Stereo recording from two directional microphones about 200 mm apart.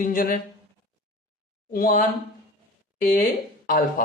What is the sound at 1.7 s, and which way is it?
A woman's voice, 45° left (ahead or behind).